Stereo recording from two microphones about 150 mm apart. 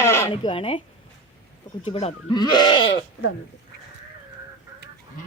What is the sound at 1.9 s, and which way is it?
Speech, 45° left (ahead or behind).